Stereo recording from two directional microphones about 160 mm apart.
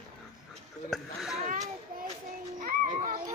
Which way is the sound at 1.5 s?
50° right (ahead or behind).